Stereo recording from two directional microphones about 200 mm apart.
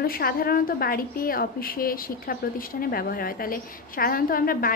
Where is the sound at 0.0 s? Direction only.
45° left (ahead or behind).